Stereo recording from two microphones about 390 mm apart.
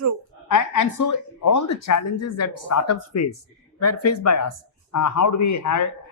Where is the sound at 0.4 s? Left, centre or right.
Left.